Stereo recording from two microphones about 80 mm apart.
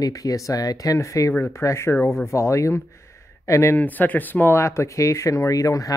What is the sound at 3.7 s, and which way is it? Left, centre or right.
Speech, left.